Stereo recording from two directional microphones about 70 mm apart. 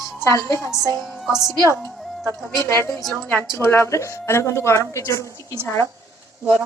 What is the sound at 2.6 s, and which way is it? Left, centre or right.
A woman's voice, left.